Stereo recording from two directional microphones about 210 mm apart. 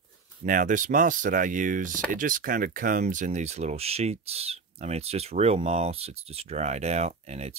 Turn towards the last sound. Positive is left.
turn(degrees=-30)  # may be behind; listen again after turning